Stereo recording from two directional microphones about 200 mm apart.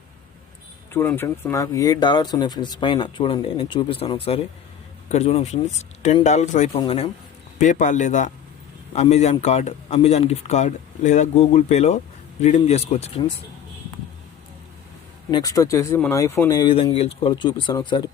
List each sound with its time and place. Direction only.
0.9 s a man's voice: 10° left (ahead or behind); by 7.1 s 25° left (ahead or behind)
7.6 s a man's voice: 40° left (ahead or behind)
15.3 s speech: 20° left (ahead or behind)